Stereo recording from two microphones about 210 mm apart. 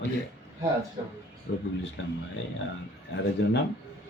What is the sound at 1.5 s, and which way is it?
Speech, 50° left (ahead or behind).